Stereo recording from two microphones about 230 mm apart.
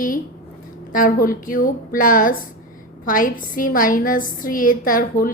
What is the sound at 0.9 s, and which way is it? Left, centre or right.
A woman's voice, left.